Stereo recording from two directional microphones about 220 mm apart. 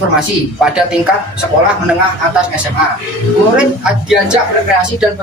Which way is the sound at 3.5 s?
5° right (ahead or behind).